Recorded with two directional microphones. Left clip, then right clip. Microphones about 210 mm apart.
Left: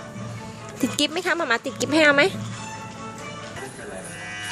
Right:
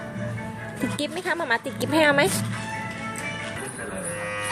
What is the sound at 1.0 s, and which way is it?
A woman's voice, 35° left (ahead or behind).